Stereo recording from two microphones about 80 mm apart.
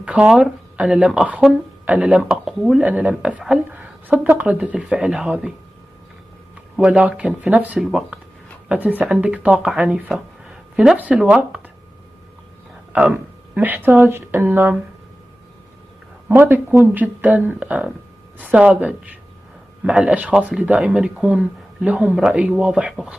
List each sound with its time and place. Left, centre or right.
0.0 s speech: centre
2.8 s speech: centre
6.8 s speech: centre
10.1 s a sound: centre
11.0 s speech: centre
12.9 s speech: centre
16.3 s speech: right
19.9 s speech: centre
20.2 s speech: centre